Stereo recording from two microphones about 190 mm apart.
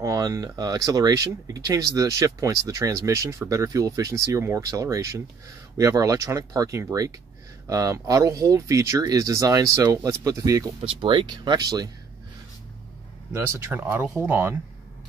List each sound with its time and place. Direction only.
0.0 s speech: 15° right (ahead or behind)
13.3 s speech: 10° right (ahead or behind)